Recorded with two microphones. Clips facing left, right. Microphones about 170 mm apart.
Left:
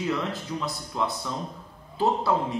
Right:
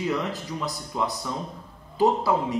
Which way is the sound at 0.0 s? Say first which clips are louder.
Right 1 dB; 5° right (ahead or behind).